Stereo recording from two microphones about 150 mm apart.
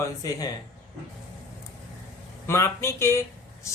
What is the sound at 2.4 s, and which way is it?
Speech, 15° left (ahead or behind).